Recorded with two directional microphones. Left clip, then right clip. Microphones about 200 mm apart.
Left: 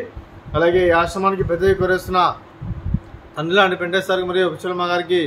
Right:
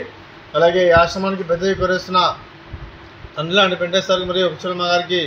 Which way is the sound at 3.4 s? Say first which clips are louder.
Even; 45° left (ahead or behind).